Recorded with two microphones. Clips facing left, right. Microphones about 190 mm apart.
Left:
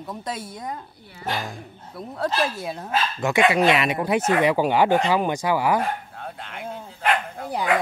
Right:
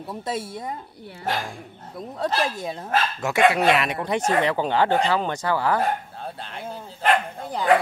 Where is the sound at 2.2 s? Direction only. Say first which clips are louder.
Even; 5° left (ahead or behind).